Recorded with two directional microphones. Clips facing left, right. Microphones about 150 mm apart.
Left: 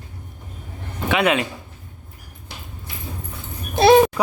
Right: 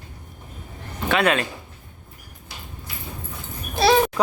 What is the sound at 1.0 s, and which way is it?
Speech, 15° left (ahead or behind).